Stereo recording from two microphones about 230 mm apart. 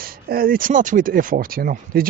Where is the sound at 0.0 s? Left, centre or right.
Right.